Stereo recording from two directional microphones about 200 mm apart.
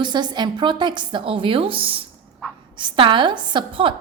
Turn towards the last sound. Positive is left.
turn(degrees=-25)  # may be behind; listen again after turning